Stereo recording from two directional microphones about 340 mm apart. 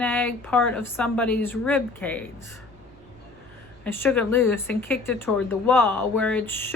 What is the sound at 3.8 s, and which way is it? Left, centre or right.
A woman's voice, centre.